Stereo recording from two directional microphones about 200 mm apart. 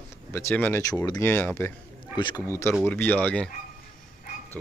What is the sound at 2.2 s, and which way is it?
Speech, 20° left (ahead or behind).